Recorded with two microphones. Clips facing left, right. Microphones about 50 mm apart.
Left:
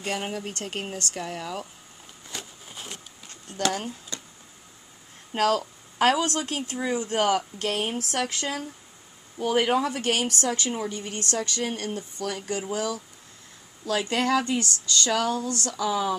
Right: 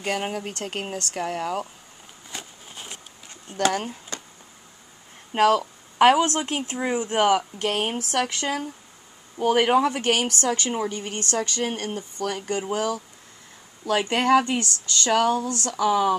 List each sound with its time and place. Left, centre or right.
0.0 s speech: centre
2.3 s a sound: centre
3.7 s speech: right
5.3 s speech: right
7.7 s speech: right
11.3 s speech: right